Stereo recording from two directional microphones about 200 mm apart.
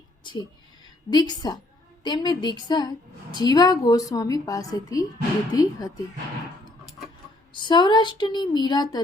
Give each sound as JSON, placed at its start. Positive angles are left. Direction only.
{"t": 0.2, "sound": "a woman's voice", "side_deg": 25}
{"t": 7.5, "sound": "a woman's voice", "side_deg": 20}